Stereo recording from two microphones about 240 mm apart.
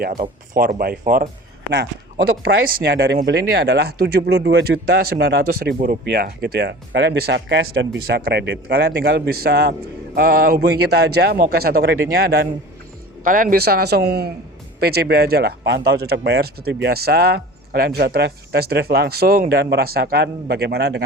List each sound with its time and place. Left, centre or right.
0.0 s speech: right
2.4 s speech: right